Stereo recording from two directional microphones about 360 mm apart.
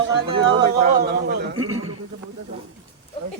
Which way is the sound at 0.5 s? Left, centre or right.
Right.